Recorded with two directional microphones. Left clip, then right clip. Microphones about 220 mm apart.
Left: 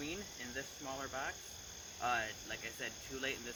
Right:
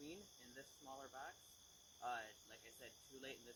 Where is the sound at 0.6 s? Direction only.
Centre (ahead or behind).